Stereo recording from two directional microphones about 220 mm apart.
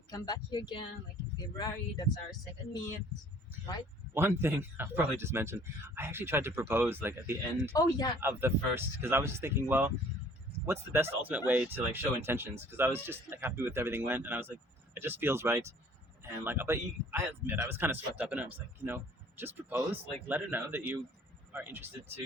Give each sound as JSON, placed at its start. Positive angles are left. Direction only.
{"t": 0.1, "sound": "speech", "side_deg": 20}
{"t": 4.1, "sound": "speech", "side_deg": -10}
{"t": 7.8, "sound": "speech", "side_deg": 20}
{"t": 8.2, "sound": "speech", "side_deg": -10}